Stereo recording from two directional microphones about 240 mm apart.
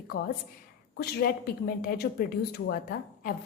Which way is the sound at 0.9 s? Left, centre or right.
Left.